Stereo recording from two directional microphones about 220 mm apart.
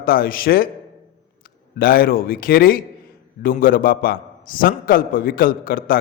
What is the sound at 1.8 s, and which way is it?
A man's voice, 40° left (ahead or behind).